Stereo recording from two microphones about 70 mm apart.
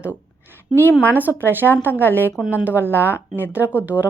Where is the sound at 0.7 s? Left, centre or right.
Left.